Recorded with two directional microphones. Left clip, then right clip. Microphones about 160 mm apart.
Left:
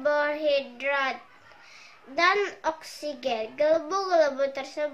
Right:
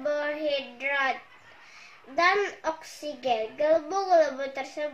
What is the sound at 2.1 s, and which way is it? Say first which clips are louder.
A child's voice: even; 10° left (ahead or behind).